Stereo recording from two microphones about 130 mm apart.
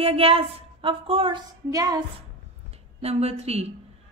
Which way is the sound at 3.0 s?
50° right (ahead or behind).